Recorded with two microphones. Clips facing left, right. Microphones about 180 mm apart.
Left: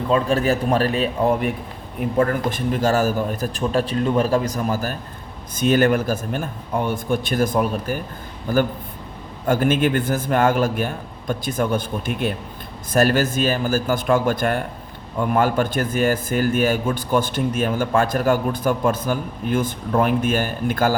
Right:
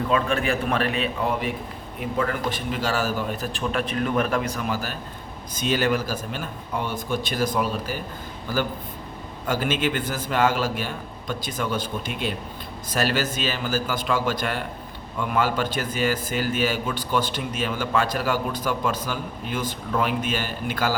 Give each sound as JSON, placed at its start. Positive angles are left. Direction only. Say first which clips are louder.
{"t": 0.1, "sound": "a man's voice", "louder": "left 6 dB", "side_deg": 35}
{"t": 2.0, "sound": "a man's voice", "louder": "left 6 dB", "side_deg": 50}
{"t": 9.5, "sound": "a man's voice", "louder": "left 6 dB", "side_deg": 50}